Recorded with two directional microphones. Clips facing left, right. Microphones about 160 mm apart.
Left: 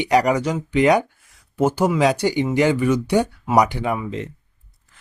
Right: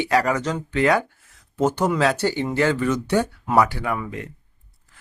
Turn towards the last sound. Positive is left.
turn(degrees=20)  # may be behind; listen again after turning